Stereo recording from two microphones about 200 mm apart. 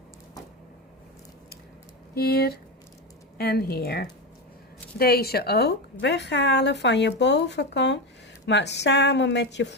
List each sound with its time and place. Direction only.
2.1 s a woman's voice: 50° left (ahead or behind)